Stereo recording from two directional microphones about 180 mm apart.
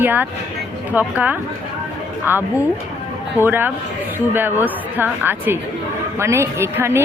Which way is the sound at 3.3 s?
10° right (ahead or behind).